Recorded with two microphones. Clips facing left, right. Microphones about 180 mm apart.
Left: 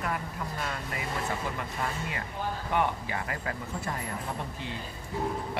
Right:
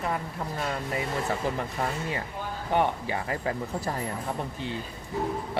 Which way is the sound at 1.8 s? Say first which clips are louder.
Right 4 dB; 30° right (ahead or behind).